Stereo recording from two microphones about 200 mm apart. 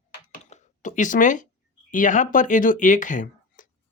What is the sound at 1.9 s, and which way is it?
Speech, 40° left (ahead or behind).